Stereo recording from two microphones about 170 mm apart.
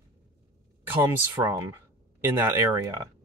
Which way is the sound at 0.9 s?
15° right (ahead or behind).